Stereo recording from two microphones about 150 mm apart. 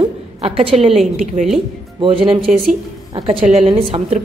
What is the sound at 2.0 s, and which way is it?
A woman's voice, 35° right (ahead or behind).